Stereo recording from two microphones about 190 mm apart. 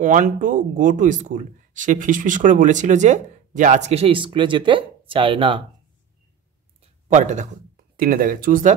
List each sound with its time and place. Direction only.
0.0 s speech: 40° right (ahead or behind); by 5.6 s 25° right (ahead or behind)
6.8 s speech: 40° right (ahead or behind)